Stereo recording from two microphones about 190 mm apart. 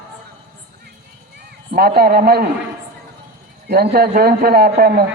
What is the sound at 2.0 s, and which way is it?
Speech, 55° right (ahead or behind).